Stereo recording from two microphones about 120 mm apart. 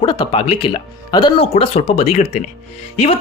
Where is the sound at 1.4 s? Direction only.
50° left (ahead or behind).